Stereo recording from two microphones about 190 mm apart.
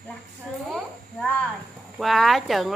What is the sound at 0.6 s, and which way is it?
A child's voice, 5° left (ahead or behind).